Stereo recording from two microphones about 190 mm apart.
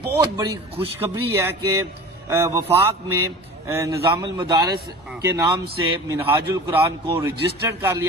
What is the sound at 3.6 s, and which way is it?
A man's voice, 15° right (ahead or behind).